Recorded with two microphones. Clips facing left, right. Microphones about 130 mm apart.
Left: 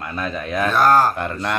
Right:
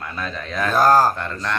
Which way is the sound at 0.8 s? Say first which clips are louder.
Even; 35° right (ahead or behind).